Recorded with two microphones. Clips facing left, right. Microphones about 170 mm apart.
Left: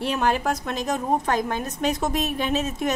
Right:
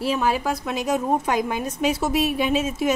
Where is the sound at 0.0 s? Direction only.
Centre (ahead or behind).